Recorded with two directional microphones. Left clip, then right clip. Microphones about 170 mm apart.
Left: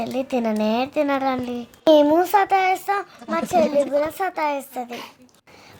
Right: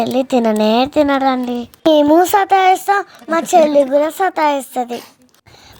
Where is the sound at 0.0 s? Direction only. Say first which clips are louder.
Right 9 dB; 35° right (ahead or behind).